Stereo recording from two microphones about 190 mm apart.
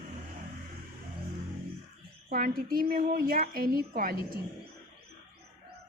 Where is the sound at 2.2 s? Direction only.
50° right (ahead or behind).